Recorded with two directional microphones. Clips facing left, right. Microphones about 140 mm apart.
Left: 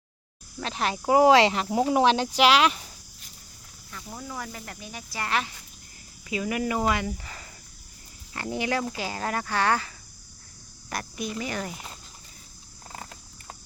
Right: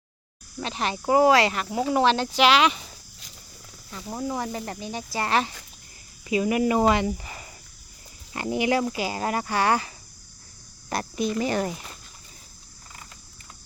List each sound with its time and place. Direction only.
0.6 s speech: centre (ahead or behind)
1.3 s speech: 20° left (ahead or behind); by 2.8 s centre (ahead or behind)
3.9 s speech: 25° right (ahead or behind)
10.8 s a woman's voice: 30° right (ahead or behind)